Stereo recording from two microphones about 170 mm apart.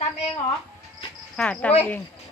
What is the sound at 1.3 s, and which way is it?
Speech, 5° left (ahead or behind).